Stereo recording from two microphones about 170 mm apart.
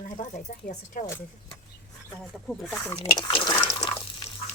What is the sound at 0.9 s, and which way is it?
Speech, 55° left (ahead or behind).